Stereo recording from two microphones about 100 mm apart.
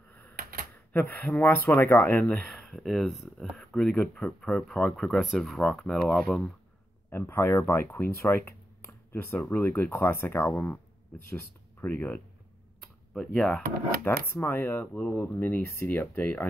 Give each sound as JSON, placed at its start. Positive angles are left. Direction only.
{"t": 1.4, "sound": "speech", "side_deg": 20}
{"t": 2.4, "sound": "speech", "side_deg": 5}
{"t": 7.1, "sound": "speech", "side_deg": 25}
{"t": 13.1, "sound": "speech", "side_deg": 5}
{"t": 14.0, "sound": "speech", "side_deg": 20}